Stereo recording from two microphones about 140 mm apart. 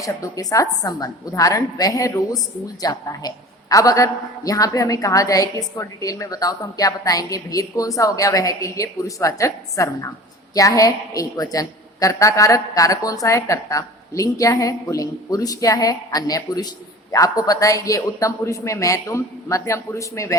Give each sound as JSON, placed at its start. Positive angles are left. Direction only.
{"t": 0.0, "sound": "a woman's voice", "side_deg": 25}